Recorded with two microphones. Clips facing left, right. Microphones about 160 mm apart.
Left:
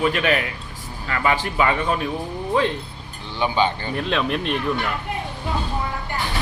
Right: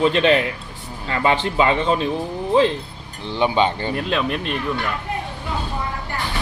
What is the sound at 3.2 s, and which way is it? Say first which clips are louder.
Speech: right 3 dB; 30° right (ahead or behind).